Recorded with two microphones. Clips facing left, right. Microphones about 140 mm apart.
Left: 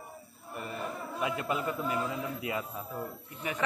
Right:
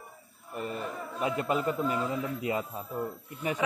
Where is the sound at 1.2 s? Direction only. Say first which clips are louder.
Right 4 dB; 35° right (ahead or behind).